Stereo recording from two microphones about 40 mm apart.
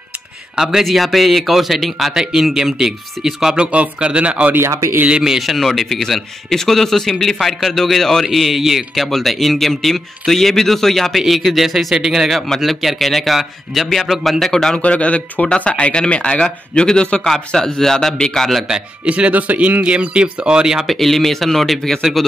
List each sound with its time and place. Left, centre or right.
0.6 s speech: centre
0.8 s speech: centre
2.1 s speech: centre
3.5 s speech: right
5.4 s a man's voice: centre
9.0 s speech: centre
11.1 s speech: centre
12.4 s a man's voice: centre
14.8 s speech: left
17.6 s a man's voice: centre
19.0 s speech: right; by 20.8 s centre
20.8 s speech: centre